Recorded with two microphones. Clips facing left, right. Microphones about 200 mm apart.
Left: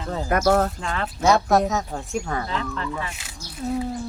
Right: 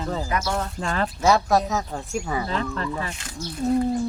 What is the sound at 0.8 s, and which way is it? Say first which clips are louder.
Speech: right 3 dB; 40° right (ahead or behind).